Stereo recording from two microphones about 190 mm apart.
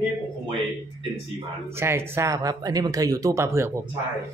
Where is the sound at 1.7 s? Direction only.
10° right (ahead or behind).